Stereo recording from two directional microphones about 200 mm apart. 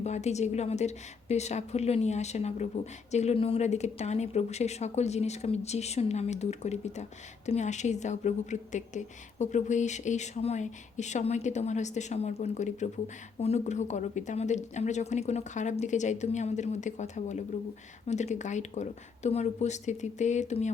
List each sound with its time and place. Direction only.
0.0 s a woman's voice: 35° left (ahead or behind)